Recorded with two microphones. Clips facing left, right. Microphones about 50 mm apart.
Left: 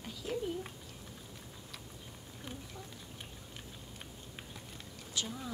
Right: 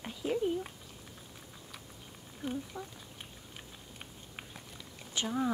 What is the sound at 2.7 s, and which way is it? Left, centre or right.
Speech, right.